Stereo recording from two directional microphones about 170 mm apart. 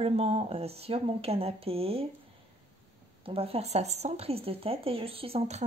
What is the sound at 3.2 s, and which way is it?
A woman's voice, 35° right (ahead or behind).